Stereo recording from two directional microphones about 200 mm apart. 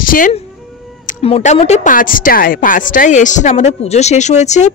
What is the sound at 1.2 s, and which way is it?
A woman's voice, 30° left (ahead or behind).